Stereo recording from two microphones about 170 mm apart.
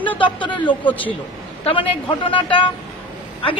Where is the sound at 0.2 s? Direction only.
30° left (ahead or behind).